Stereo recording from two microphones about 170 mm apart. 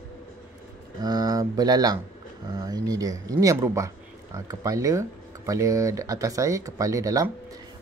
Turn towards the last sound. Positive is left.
turn(degrees=-20)  # may be behind; listen again after turning